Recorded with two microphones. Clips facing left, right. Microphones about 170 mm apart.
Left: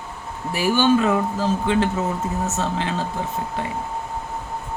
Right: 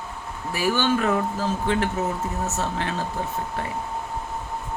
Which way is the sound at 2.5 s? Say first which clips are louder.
Left 3 dB; 20° left (ahead or behind).